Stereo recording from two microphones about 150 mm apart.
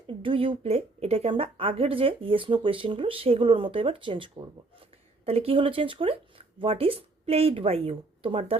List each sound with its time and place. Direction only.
0.1 s speech: 35° right (ahead or behind)